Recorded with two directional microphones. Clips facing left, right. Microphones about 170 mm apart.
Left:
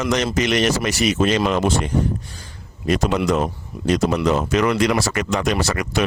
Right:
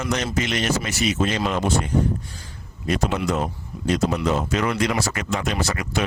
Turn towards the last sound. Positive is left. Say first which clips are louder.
# left 4 dB
turn(degrees=80)